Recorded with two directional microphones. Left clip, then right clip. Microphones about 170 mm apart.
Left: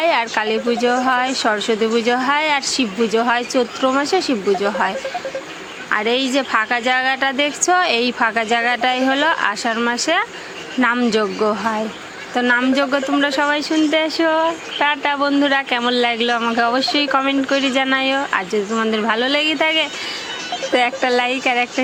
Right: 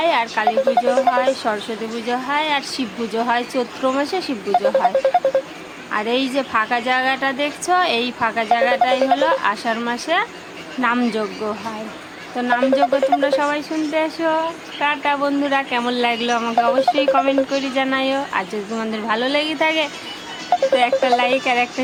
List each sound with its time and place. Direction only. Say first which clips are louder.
0.0 s a sound: left 1 dB; 30° left (ahead or behind)
0.9 s a woman's voice: right 1 dB; 25° left (ahead or behind)
5.9 s a woman's voice: left 3 dB; 15° left (ahead or behind)